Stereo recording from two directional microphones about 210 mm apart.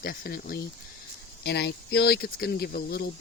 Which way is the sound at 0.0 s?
45° left (ahead or behind).